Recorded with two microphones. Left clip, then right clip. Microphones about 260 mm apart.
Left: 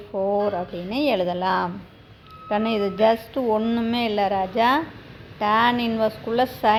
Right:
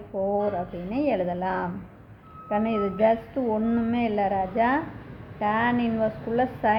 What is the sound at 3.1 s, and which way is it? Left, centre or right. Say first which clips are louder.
Speech: left 4 dB; left.